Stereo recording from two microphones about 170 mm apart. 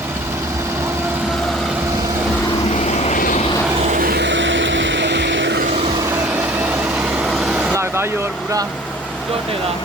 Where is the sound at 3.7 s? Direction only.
45° right (ahead or behind); by 5.6 s 90° right.